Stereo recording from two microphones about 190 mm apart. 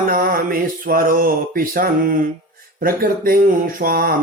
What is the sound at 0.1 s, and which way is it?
Speech, 45° right (ahead or behind).